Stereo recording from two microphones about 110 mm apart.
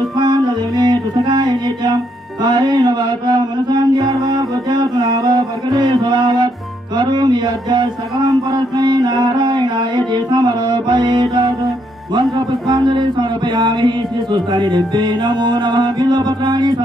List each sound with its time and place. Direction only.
0.2 s music: 40° right (ahead or behind)
2.4 s mantra: 40° right (ahead or behind)
7.0 s a sound: 40° right (ahead or behind)
12.1 s mantra: 40° right (ahead or behind)